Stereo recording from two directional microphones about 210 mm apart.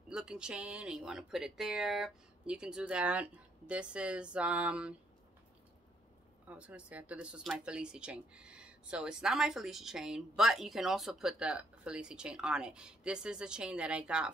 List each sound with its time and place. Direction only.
0.1 s speech: 5° right (ahead or behind)
6.4 s speech: 5° right (ahead or behind)